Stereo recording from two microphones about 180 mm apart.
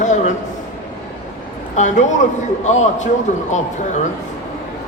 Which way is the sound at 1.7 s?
40° left (ahead or behind).